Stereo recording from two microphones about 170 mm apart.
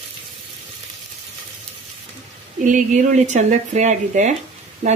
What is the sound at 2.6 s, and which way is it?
Speech, 50° right (ahead or behind).